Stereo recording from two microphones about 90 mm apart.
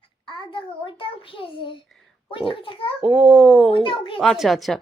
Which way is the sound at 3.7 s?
70° left (ahead or behind).